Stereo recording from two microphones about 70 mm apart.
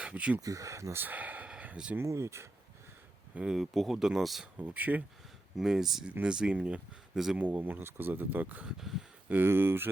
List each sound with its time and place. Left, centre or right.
0.0 s speech: centre
0.3 s speech: right
0.9 s speech: right
1.5 s a sound: centre
2.0 s speech: right
3.3 s speech: centre
4.6 s speech: right
5.5 s speech: centre
7.3 s speech: right
8.6 s speech: centre
9.3 s speech: right